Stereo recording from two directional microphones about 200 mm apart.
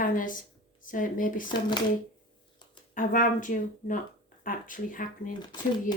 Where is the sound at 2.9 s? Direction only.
40° left (ahead or behind).